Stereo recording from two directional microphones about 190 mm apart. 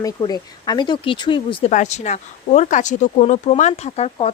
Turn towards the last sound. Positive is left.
turn(degrees=35)  # may be behind; listen again after turning